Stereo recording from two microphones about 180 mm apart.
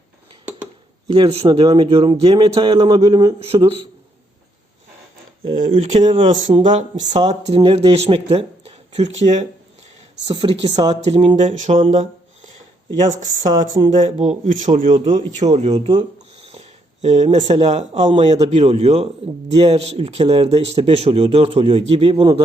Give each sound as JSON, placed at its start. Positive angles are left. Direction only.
{"t": 1.0, "sound": "speech", "side_deg": -30}
{"t": 5.7, "sound": "speech", "side_deg": -40}
{"t": 13.2, "sound": "speech", "side_deg": -20}
{"t": 13.8, "sound": "speech", "side_deg": -40}
{"t": 15.4, "sound": "speech", "side_deg": -30}